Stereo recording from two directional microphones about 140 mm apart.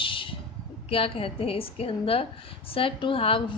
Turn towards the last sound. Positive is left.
turn(degrees=40)  # may be behind; listen again after turning